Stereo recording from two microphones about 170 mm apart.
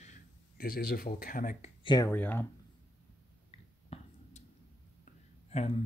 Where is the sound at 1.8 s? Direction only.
25° left (ahead or behind).